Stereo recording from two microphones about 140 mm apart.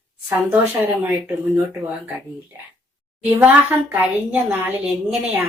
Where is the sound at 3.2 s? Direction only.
10° right (ahead or behind).